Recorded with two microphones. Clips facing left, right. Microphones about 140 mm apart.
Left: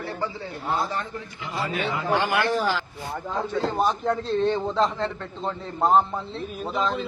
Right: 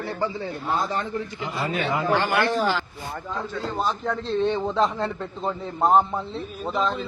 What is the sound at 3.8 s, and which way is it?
A man's voice, centre (ahead or behind).